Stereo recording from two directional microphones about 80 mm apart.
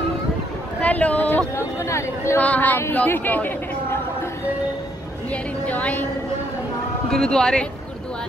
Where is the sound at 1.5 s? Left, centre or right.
Left.